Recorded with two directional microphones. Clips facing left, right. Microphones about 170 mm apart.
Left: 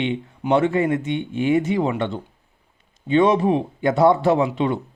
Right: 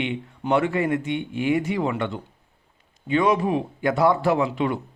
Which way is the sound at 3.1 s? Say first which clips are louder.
Left 4 dB; 25° left (ahead or behind).